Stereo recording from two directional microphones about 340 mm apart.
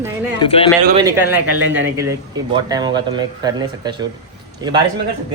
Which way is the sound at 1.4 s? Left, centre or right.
Right.